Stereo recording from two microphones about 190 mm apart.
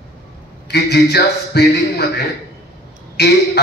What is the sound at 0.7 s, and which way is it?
A man's voice, 60° left (ahead or behind).